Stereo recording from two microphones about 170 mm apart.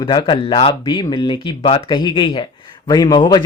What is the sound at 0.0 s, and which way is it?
Speech, 25° left (ahead or behind).